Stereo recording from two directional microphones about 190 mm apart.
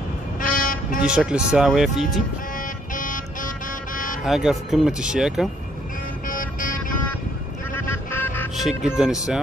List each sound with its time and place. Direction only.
0.6 s vehicle: 45° left (ahead or behind)
1.0 s speech: 5° right (ahead or behind)
2.9 s vehicle: 45° left (ahead or behind)
4.2 s speech: centre (ahead or behind)
6.2 s vehicle: 45° left (ahead or behind)
7.7 s honk: 10° left (ahead or behind)
8.5 s speech: centre (ahead or behind)